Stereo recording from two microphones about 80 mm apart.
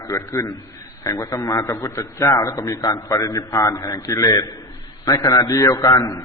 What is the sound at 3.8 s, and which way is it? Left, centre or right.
A man's voice, left.